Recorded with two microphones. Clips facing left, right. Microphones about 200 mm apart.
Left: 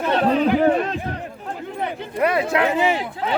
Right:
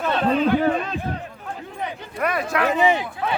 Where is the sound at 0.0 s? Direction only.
15° left (ahead or behind).